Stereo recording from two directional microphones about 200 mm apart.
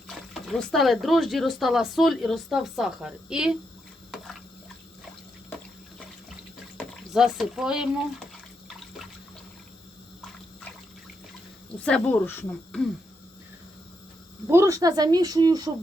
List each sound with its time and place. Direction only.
0.1 s speech: centre (ahead or behind)
6.7 s speech: centre (ahead or behind)
11.8 s speech: 5° left (ahead or behind)
14.4 s speech: 15° right (ahead or behind)